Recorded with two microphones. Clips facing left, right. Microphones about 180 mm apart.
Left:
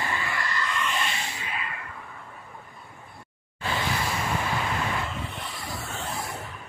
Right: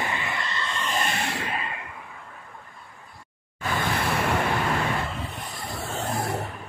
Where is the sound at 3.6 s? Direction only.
50° right (ahead or behind).